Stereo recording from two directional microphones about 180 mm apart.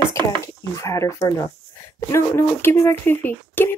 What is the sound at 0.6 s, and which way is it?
Speech, 15° left (ahead or behind).